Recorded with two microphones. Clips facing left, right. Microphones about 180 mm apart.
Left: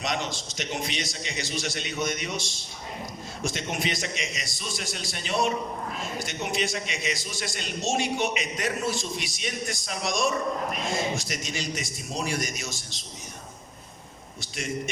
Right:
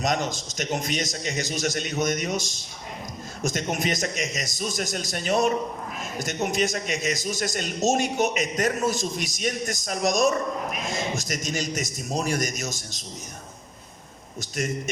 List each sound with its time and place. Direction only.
0.0 s a man's voice: 45° right (ahead or behind)